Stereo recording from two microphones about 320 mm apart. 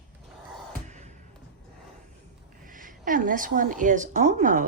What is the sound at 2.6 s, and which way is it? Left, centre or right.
A woman's voice, right.